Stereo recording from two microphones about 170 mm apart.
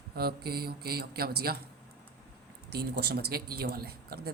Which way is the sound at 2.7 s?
70° right (ahead or behind).